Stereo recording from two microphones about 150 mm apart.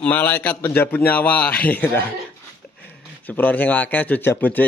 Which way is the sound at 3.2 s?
10° left (ahead or behind).